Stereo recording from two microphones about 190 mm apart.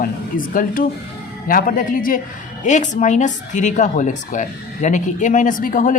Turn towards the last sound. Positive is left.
turn(degrees=45)  # may be behind; listen again after turning